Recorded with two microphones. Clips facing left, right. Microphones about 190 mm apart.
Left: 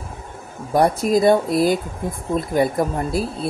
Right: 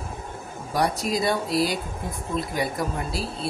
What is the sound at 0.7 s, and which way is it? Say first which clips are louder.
Speech: left 8 dB; 50° left (ahead or behind).